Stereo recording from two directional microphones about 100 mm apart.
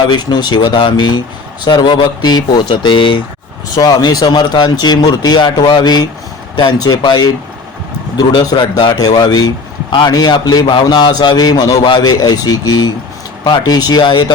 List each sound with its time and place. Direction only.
0.1 s speech: 45° left (ahead or behind)
3.8 s a man's voice: 40° left (ahead or behind)